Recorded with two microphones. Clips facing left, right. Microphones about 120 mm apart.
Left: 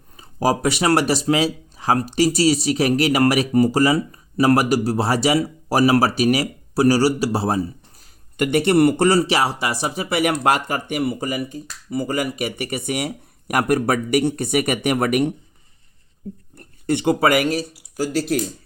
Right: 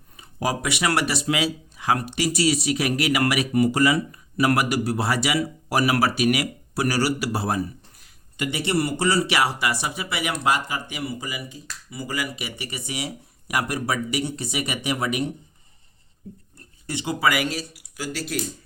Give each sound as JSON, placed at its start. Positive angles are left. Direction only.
{"t": 0.2, "sound": "speech", "side_deg": 35}
{"t": 8.4, "sound": "speech", "side_deg": 55}
{"t": 16.6, "sound": "speech", "side_deg": 60}